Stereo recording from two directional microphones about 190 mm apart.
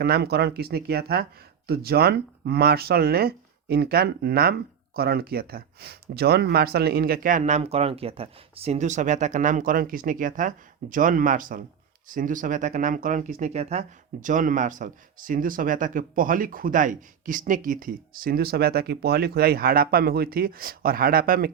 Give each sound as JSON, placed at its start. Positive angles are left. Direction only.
{"t": 0.0, "sound": "speech", "side_deg": -55}